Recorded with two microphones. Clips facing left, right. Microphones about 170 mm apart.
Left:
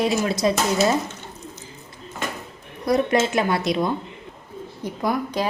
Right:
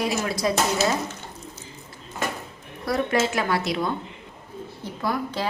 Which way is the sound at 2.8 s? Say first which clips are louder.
Left 4 dB; 20° left (ahead or behind).